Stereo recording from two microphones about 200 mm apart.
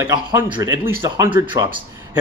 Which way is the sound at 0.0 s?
15° right (ahead or behind).